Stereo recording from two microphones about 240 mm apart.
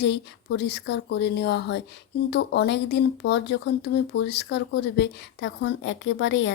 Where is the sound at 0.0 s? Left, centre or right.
Left.